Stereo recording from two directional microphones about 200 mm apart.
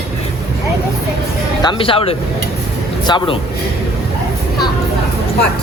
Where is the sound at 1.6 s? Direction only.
25° left (ahead or behind).